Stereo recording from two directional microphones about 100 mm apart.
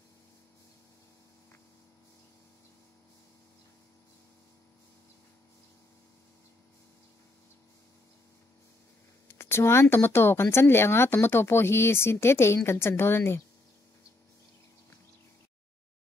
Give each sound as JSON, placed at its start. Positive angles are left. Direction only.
{"t": 9.3, "sound": "speech", "side_deg": 25}